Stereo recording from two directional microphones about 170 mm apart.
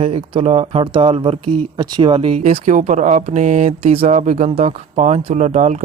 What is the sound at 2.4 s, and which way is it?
Speech, 45° right (ahead or behind).